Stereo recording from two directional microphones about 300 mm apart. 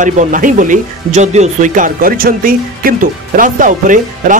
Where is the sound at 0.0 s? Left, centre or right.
Right.